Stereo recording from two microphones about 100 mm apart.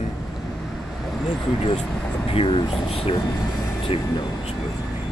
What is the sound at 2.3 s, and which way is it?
Speech, 60° left (ahead or behind).